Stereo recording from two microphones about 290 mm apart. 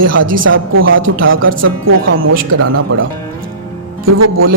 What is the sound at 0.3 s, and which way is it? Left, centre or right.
Speech, right.